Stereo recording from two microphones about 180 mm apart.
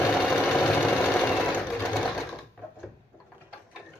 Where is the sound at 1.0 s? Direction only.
5° left (ahead or behind).